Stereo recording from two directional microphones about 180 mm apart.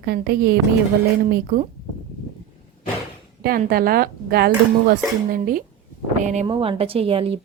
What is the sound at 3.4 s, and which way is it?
A woman's voice, 55° right (ahead or behind).